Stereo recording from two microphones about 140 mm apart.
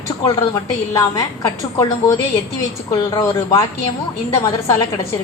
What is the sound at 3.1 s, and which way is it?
A woman's voice, 25° left (ahead or behind).